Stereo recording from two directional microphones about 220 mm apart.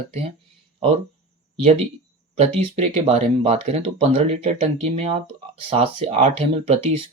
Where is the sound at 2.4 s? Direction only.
30° right (ahead or behind).